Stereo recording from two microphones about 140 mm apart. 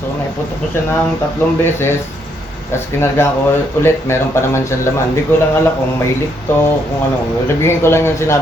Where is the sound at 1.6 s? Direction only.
15° left (ahead or behind).